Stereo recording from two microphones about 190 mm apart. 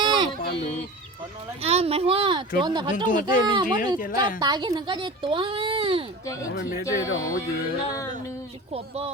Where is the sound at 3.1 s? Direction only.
45° left (ahead or behind).